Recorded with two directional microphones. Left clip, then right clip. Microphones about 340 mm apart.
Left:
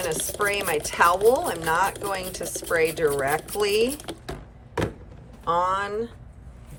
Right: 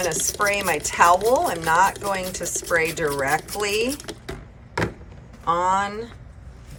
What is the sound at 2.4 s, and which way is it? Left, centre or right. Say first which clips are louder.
Speech: right 4 dB; centre.